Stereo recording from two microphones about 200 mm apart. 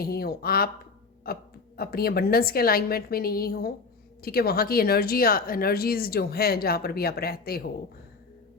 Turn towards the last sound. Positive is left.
turn(degrees=50)  # may be behind; listen again after turning